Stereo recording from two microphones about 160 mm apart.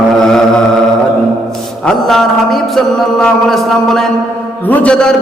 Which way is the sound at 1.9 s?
Centre (ahead or behind).